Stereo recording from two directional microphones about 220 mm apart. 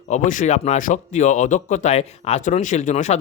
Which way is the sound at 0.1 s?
35° left (ahead or behind).